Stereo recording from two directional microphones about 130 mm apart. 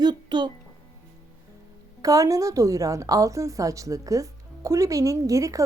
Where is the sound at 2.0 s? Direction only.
25° right (ahead or behind).